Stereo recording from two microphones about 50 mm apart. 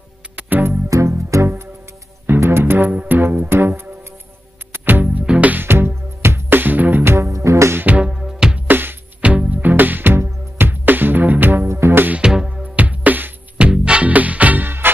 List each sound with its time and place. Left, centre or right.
0.4 s music: right
0.8 s music: right
2.4 s music: right
5.0 s music: centre
5.5 s music: right
7.2 s music: right
8.0 s music: centre
8.6 s music: right
9.2 s music: right
11.6 s music: right
12.2 s music: centre
12.6 s music: right
13.6 s music: right